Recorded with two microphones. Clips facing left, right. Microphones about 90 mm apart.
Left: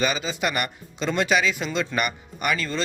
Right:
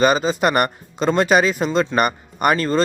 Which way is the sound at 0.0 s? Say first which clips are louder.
Right 9 dB; 45° right (ahead or behind).